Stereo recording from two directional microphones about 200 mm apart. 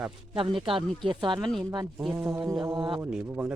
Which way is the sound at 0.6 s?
25° right (ahead or behind).